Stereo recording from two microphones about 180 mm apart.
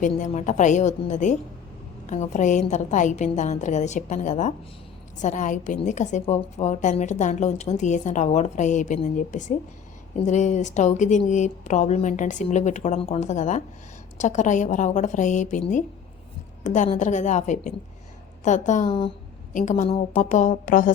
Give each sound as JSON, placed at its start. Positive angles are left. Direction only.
{"t": 0.0, "sound": "a woman's voice", "side_deg": 45}
{"t": 16.6, "sound": "a woman's voice", "side_deg": 40}
{"t": 18.9, "sound": "speech", "side_deg": 30}
{"t": 19.5, "sound": "a woman's voice", "side_deg": 45}